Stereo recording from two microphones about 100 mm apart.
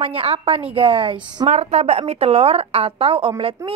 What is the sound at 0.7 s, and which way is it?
Speech, 65° right (ahead or behind).